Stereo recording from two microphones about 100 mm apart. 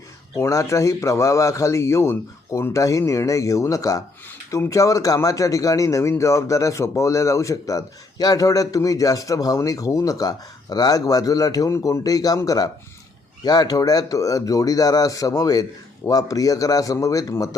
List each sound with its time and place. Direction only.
0.3 s speech: 30° left (ahead or behind)